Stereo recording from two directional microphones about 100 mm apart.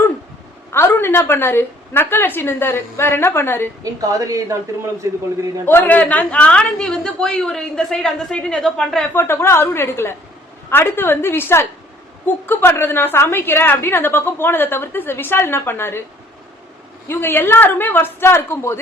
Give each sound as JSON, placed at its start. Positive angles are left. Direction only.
{"t": 0.7, "sound": "a woman's voice", "side_deg": 25}
{"t": 4.1, "sound": "a woman's voice", "side_deg": -35}
{"t": 5.6, "sound": "a woman's voice", "side_deg": 20}
{"t": 9.1, "sound": "a woman's voice", "side_deg": 25}
{"t": 17.1, "sound": "a woman's voice", "side_deg": 20}